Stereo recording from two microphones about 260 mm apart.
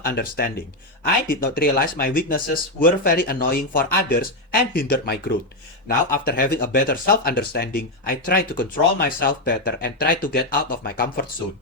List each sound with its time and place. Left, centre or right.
0.0 s speech: left